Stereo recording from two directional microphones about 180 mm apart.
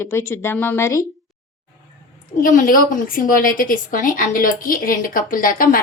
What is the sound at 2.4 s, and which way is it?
A woman's voice, 50° left (ahead or behind).